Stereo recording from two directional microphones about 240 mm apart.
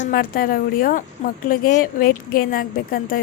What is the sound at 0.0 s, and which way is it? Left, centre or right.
Speech, left.